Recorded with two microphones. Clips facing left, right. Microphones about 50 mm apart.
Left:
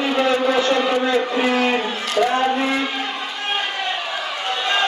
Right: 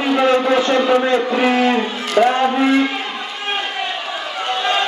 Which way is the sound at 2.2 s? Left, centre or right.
Right.